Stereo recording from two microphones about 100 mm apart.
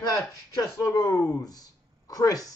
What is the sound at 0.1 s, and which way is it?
Speech, 35° left (ahead or behind).